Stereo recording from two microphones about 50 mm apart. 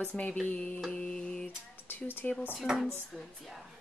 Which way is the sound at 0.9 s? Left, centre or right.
Left.